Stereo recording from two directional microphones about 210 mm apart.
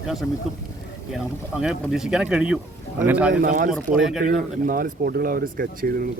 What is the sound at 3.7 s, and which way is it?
Speech, centre (ahead or behind).